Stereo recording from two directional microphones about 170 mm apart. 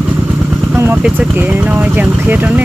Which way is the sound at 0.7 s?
10° right (ahead or behind).